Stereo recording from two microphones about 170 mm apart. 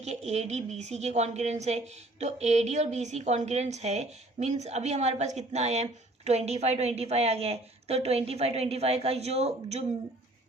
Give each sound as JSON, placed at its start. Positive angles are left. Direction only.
{"t": 0.0, "sound": "a woman's voice", "side_deg": -40}